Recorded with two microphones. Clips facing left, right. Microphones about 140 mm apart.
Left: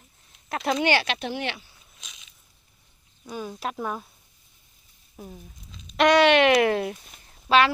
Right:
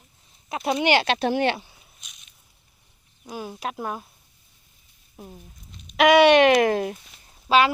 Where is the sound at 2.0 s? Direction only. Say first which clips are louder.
Left 3 dB; 90° left.